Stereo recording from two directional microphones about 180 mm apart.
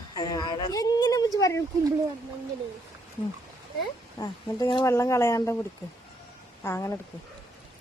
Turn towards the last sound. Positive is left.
turn(degrees=15)  # may be behind; listen again after turning